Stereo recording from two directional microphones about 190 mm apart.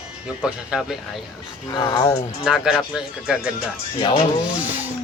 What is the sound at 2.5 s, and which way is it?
Speech, 5° right (ahead or behind).